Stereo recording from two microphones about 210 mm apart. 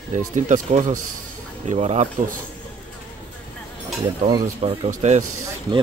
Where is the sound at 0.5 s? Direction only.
35° right (ahead or behind).